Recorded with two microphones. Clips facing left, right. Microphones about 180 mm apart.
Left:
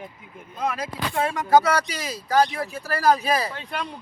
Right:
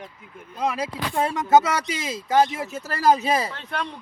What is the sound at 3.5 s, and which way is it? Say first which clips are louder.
Speech: right 1 dB; 10° left (ahead or behind).